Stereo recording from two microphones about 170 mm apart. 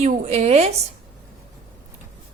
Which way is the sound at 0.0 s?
40° right (ahead or behind).